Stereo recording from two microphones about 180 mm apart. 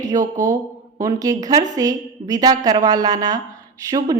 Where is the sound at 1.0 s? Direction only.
20° right (ahead or behind).